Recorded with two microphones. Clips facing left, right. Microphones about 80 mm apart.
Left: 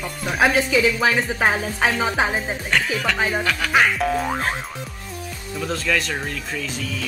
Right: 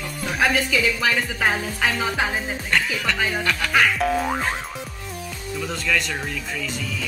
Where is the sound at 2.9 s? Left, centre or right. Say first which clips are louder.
Left 2 dB; centre.